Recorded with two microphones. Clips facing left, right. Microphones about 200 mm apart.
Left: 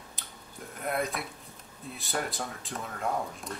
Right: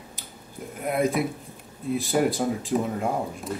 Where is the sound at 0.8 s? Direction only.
Centre (ahead or behind).